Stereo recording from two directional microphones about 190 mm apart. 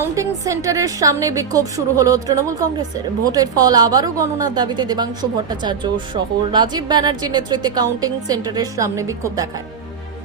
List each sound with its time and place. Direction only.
0.2 s a woman's voice: 15° right (ahead or behind)